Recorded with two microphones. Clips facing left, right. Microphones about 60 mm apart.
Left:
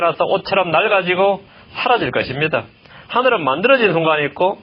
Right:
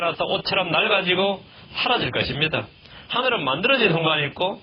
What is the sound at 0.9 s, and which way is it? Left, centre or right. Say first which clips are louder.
A man's voice: left 6 dB; left.